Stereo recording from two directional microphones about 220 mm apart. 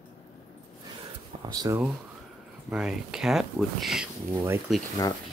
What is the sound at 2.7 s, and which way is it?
Speech, centre (ahead or behind).